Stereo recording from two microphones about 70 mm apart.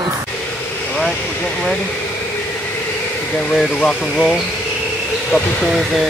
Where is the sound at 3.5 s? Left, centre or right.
Centre.